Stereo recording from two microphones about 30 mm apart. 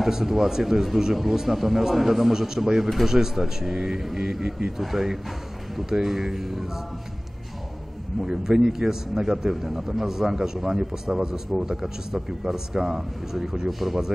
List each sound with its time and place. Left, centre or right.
0.0 s speech: centre
2.3 s speech: centre
2.8 s speech: centre
3.1 s speech: centre
8.3 s speech: centre
13.7 s speech: centre